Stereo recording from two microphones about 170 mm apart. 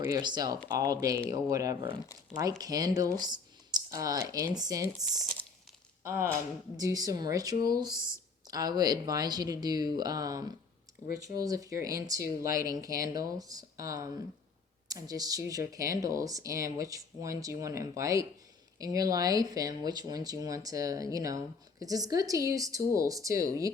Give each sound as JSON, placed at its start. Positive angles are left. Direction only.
{"t": 0.0, "sound": "speech", "side_deg": -25}
{"t": 5.2, "sound": "speech", "side_deg": 5}
{"t": 6.0, "sound": "speech", "side_deg": -15}